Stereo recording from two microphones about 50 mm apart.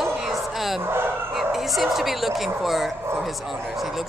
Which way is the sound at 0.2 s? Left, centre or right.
Centre.